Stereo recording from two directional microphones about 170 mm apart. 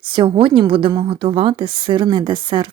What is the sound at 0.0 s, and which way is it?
A woman's voice, 30° right (ahead or behind).